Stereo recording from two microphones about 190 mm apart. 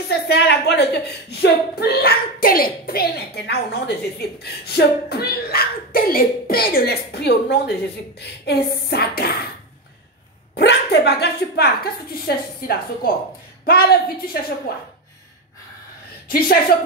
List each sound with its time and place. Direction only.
0.1 s a woman's voice: 60° left (ahead or behind)
10.5 s a woman's voice: 65° left (ahead or behind)
16.3 s a woman's voice: 50° left (ahead or behind)